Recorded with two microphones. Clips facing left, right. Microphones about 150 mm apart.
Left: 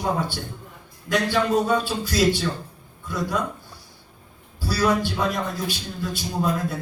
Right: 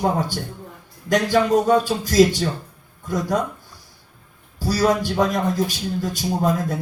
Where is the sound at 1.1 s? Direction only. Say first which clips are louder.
Right 4 dB; 45° right (ahead or behind).